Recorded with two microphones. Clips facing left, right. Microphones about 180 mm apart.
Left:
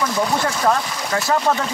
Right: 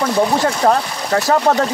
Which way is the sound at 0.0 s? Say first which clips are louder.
Right 5 dB; 35° right (ahead or behind).